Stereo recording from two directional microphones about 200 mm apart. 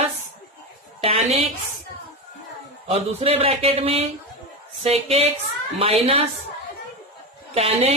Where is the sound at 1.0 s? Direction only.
30° right (ahead or behind).